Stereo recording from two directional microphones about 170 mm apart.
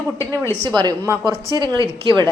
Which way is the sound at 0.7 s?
25° right (ahead or behind).